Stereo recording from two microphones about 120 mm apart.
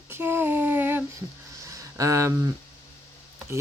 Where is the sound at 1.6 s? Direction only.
25° right (ahead or behind).